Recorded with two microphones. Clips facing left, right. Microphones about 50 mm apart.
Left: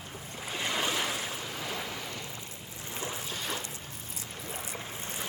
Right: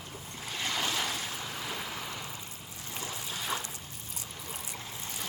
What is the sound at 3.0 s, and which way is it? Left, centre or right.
Boat, centre.